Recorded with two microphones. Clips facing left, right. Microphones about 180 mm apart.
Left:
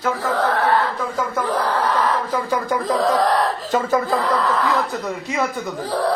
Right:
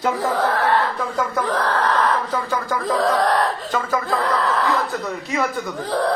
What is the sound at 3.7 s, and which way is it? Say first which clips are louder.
Speech: left 4 dB; 25° left (ahead or behind).